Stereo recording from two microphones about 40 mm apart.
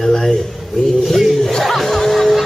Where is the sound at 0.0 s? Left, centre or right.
Centre.